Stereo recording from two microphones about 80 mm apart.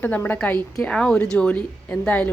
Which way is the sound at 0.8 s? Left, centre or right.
Centre.